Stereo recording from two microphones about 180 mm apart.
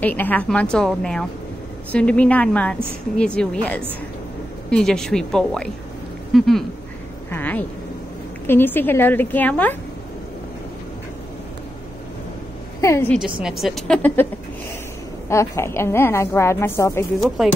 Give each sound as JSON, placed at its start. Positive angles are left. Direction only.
{"t": 0.0, "sound": "a woman's voice", "side_deg": 10}
{"t": 7.2, "sound": "a sound", "side_deg": 10}
{"t": 8.5, "sound": "a woman's voice", "side_deg": 10}
{"t": 12.8, "sound": "a woman's voice", "side_deg": 15}
{"t": 13.1, "sound": "a woman's voice", "side_deg": -5}
{"t": 15.2, "sound": "a woman's voice", "side_deg": 15}
{"t": 17.4, "sound": "a woman's voice", "side_deg": 0}